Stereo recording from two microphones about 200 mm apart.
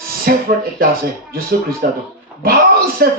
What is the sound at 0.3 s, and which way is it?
Speech, 50° right (ahead or behind).